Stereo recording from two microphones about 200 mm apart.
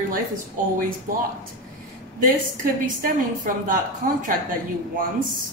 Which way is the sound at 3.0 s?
45° right (ahead or behind).